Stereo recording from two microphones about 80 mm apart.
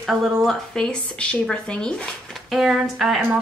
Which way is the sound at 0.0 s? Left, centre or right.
Centre.